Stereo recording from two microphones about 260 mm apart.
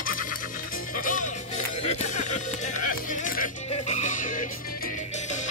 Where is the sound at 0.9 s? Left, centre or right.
Left.